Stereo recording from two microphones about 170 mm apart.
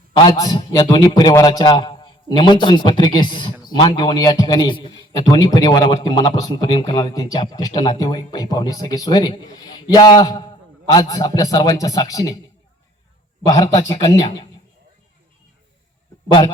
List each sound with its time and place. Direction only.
0.3 s a man's voice: 25° left (ahead or behind)
13.4 s speech: 20° left (ahead or behind)